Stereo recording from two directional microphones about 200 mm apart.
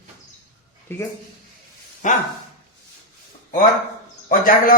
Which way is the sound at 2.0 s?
40° left (ahead or behind).